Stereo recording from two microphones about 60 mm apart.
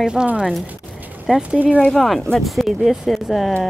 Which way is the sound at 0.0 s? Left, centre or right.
Centre.